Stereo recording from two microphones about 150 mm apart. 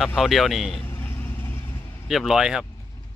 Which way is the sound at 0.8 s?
15° left (ahead or behind).